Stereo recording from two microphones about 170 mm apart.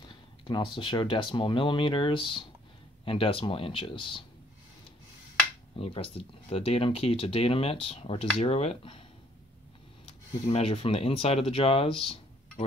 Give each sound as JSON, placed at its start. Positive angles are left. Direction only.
{"t": 0.0, "sound": "speech", "side_deg": 30}
{"t": 5.8, "sound": "speech", "side_deg": 35}
{"t": 10.0, "sound": "speech", "side_deg": 35}